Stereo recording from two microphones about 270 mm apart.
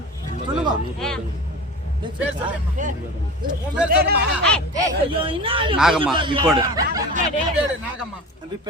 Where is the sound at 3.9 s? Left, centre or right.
Right.